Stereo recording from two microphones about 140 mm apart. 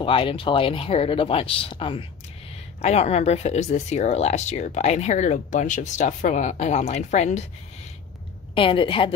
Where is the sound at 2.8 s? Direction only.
50° left (ahead or behind).